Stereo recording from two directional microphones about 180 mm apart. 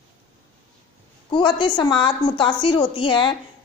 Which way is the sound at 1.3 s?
25° left (ahead or behind).